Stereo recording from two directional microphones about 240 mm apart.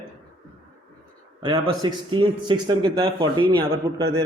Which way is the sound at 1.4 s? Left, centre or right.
Centre.